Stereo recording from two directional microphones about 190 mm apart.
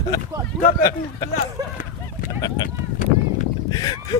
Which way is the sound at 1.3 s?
45° left (ahead or behind).